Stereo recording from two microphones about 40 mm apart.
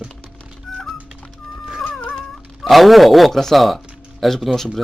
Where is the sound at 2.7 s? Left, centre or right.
Centre.